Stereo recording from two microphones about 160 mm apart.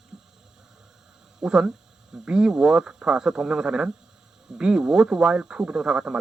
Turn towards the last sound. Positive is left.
turn(degrees=-5)  # may be behind; listen again after turning